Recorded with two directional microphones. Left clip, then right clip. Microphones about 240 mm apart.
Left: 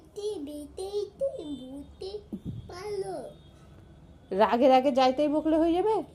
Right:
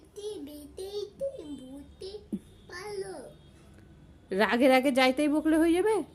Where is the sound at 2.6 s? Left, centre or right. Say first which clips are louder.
Left 4 dB; centre.